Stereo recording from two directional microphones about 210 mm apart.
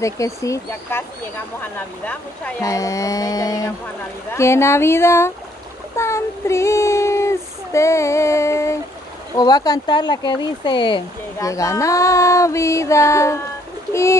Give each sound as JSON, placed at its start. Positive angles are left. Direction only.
{"t": 0.0, "sound": "speech", "side_deg": 15}
{"t": 2.0, "sound": "speech", "side_deg": 10}
{"t": 5.9, "sound": "child singing", "side_deg": 15}
{"t": 9.3, "sound": "speech", "side_deg": 20}